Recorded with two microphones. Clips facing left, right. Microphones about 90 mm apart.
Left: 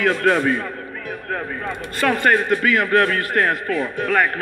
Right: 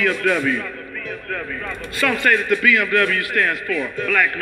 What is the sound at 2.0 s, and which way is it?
A man's voice, 40° left (ahead or behind).